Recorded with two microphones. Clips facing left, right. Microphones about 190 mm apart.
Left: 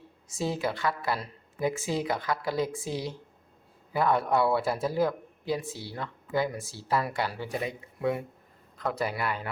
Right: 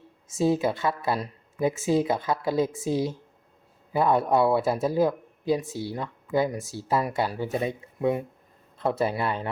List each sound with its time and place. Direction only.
0.3 s speech: 20° right (ahead or behind)